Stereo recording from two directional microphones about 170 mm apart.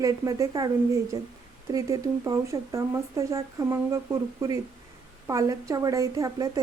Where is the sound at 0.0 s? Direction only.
20° right (ahead or behind).